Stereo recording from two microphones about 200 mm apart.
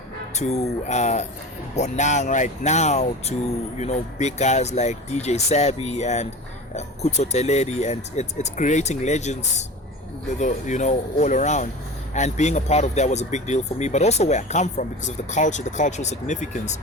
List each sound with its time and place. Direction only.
0.3 s speech: 35° left (ahead or behind)